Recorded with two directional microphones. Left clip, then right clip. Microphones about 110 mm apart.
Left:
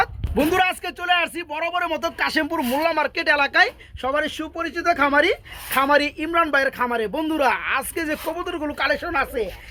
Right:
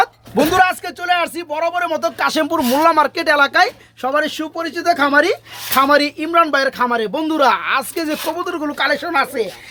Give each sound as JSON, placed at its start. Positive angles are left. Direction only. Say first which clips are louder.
{"t": 0.3, "sound": "a sound", "louder": "right 6 dB", "side_deg": 10}
{"t": 1.5, "sound": "speech", "louder": "right 6 dB", "side_deg": 20}
{"t": 2.1, "sound": "speech", "louder": "right 5 dB", "side_deg": -5}
{"t": 2.8, "sound": "speech", "louder": "right 7 dB", "side_deg": -15}
{"t": 4.0, "sound": "speech", "louder": "right 5 dB", "side_deg": 25}
{"t": 9.0, "sound": "speech", "louder": "right 5 dB", "side_deg": 40}